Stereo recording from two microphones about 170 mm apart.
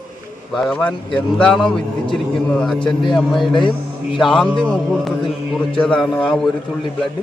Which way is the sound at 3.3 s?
30° left (ahead or behind).